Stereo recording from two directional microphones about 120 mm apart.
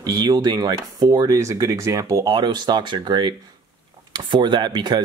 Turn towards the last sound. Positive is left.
turn(degrees=-35)  # may be behind; listen again after turning